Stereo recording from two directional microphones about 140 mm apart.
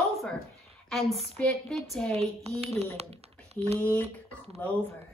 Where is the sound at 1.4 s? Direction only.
5° left (ahead or behind).